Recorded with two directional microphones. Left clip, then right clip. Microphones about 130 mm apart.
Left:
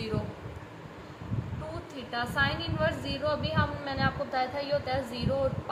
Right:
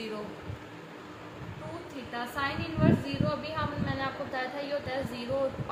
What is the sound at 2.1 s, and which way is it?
A woman's voice, 30° left (ahead or behind).